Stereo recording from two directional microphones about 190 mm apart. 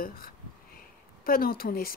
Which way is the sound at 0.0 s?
50° left (ahead or behind).